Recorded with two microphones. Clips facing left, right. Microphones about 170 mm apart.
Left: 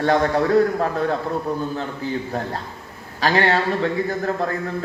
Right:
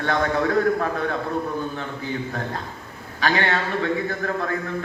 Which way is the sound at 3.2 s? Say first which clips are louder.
Left 4 dB; 35° left (ahead or behind).